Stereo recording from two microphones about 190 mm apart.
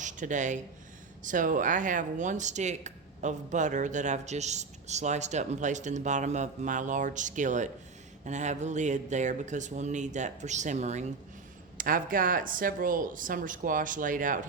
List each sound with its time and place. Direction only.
0.0 s speech: 40° right (ahead or behind)